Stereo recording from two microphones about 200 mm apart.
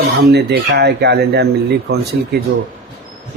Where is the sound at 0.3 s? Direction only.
55° right (ahead or behind).